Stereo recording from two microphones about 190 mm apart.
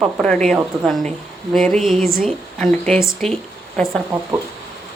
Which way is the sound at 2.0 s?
45° right (ahead or behind).